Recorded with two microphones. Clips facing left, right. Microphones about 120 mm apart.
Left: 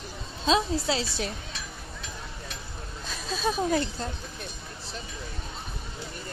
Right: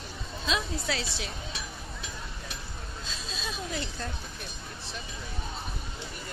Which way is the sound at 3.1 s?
50° left (ahead or behind).